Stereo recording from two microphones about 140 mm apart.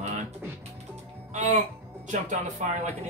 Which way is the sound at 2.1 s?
60° right (ahead or behind).